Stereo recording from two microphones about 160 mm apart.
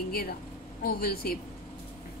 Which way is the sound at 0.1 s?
70° left (ahead or behind).